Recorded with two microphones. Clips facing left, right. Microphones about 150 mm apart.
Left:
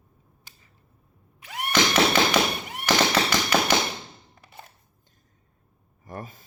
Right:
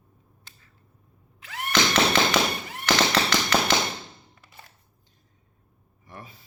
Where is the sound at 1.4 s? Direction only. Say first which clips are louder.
Left 1 dB; 10° left (ahead or behind).